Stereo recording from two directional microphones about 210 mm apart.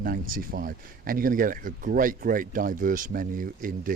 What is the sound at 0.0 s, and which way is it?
Speech, 45° right (ahead or behind).